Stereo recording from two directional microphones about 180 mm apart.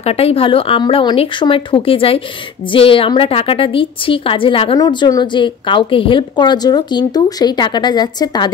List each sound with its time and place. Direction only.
0.0 s a woman's voice: 35° left (ahead or behind)